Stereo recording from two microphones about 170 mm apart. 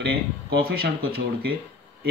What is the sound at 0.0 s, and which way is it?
Speech, 70° right (ahead or behind).